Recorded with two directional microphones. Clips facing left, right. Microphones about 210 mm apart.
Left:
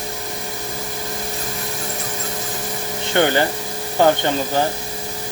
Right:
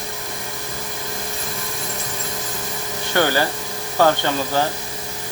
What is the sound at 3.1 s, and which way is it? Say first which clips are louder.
Speech: left 2 dB; 20° left (ahead or behind).